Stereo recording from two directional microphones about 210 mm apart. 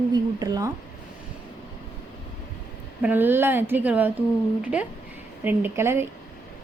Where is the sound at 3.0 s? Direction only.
10° right (ahead or behind).